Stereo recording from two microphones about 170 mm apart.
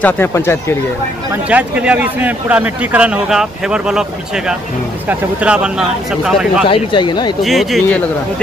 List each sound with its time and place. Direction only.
0.0 s speech: 15° left (ahead or behind)
1.3 s a man's voice: 10° right (ahead or behind)
5.0 s speech: 5° right (ahead or behind)
6.7 s speech: 30° left (ahead or behind)
7.4 s speech: centre (ahead or behind)